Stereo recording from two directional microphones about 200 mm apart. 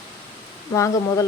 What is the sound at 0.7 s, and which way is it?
Speech, 15° left (ahead or behind).